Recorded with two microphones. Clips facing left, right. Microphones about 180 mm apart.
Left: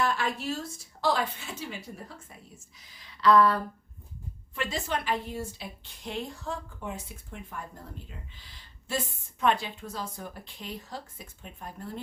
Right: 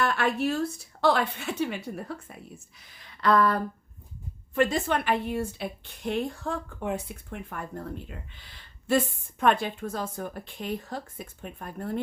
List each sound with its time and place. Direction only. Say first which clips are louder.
0.0 s a woman's voice: right 4 dB; 60° right (ahead or behind)
2.8 s a sound: left 2 dB; 55° right (ahead or behind)
4.5 s a woman's voice: right 7 dB; 50° right (ahead or behind)